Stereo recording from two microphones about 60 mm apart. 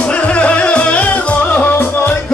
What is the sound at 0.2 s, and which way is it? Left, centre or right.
Music, left.